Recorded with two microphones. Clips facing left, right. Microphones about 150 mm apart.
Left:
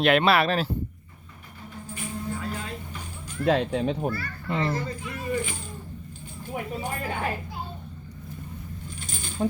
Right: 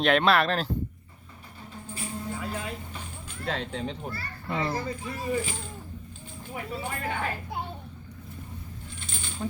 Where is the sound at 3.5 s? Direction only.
65° left (ahead or behind).